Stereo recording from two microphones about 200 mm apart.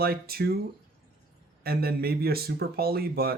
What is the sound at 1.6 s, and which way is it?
Speech, 50° right (ahead or behind).